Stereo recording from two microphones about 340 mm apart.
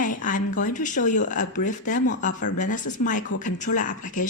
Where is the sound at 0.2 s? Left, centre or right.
Left.